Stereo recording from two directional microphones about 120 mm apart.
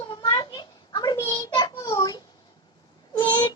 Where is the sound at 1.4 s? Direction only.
35° left (ahead or behind).